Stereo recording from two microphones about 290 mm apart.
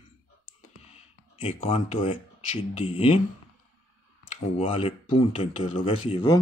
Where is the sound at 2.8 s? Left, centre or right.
Centre.